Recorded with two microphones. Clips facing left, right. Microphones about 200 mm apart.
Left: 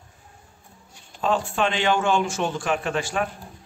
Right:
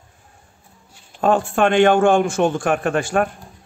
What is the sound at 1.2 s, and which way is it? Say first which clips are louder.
Speech: right 6 dB; 55° right (ahead or behind).